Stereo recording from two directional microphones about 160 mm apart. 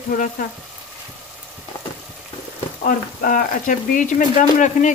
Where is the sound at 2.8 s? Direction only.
55° left (ahead or behind).